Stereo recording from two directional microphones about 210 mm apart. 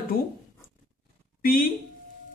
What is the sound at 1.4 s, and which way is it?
Speech, 45° left (ahead or behind).